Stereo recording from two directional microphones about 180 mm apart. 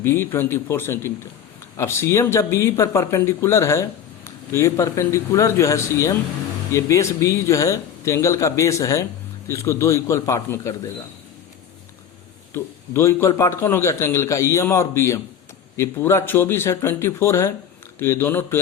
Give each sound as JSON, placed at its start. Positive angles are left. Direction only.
{"t": 0.0, "sound": "speech", "side_deg": 15}
{"t": 12.5, "sound": "speech", "side_deg": 15}